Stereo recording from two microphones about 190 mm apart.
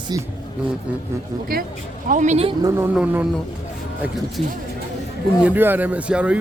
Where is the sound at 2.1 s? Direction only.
40° right (ahead or behind); by 3.2 s 5° right (ahead or behind).